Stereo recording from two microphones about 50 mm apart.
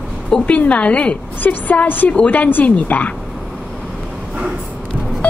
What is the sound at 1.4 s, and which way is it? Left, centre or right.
A woman's voice, left.